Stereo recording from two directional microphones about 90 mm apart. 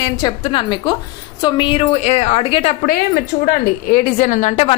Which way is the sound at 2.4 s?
90° left.